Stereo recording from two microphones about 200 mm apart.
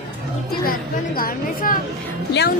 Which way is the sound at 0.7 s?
45° left (ahead or behind).